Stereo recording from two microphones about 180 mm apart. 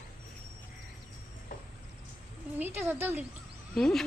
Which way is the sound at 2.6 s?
10° right (ahead or behind).